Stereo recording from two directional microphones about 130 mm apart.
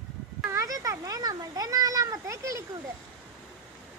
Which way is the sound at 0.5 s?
25° right (ahead or behind).